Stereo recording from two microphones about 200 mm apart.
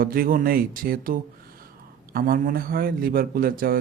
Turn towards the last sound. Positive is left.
turn(degrees=-45)  # may be behind; listen again after turning